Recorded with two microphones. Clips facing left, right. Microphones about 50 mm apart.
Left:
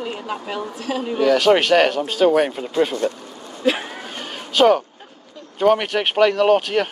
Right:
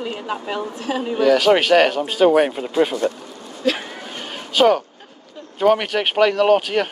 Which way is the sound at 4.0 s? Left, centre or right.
Centre.